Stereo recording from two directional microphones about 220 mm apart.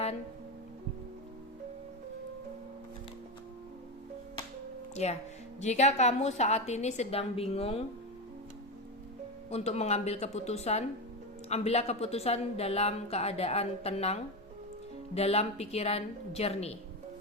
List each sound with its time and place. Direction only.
5.0 s a woman's voice: 30° left (ahead or behind)
9.5 s a woman's voice: 30° left (ahead or behind)